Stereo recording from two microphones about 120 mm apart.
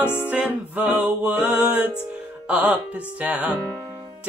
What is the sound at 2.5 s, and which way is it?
Speech, 10° right (ahead or behind).